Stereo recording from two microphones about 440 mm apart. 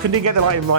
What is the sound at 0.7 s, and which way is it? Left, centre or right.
Speech, right.